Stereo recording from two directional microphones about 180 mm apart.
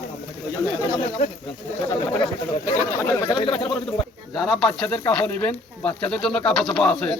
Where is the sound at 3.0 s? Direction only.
20° left (ahead or behind).